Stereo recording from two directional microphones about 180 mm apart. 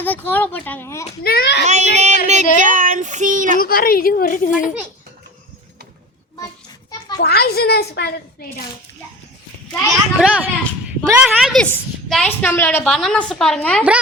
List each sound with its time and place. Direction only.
0.0 s speech: 10° left (ahead or behind)
1.2 s a child's voice: 60° left (ahead or behind)
1.6 s yodeling: 40° right (ahead or behind)
2.6 s speech: 50° right (ahead or behind)
3.6 s a woman's voice: 55° left (ahead or behind)
7.2 s a child's voice: 60° left (ahead or behind)
9.7 s a woman's voice: 5° right (ahead or behind)